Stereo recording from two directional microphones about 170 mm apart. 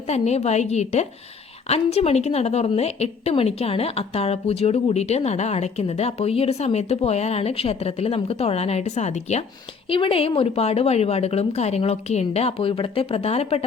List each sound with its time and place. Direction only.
0.1 s a woman's voice: 40° left (ahead or behind)